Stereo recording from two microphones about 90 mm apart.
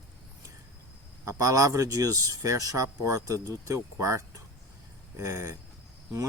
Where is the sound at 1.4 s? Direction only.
40° right (ahead or behind).